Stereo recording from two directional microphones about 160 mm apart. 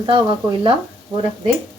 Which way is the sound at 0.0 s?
35° right (ahead or behind).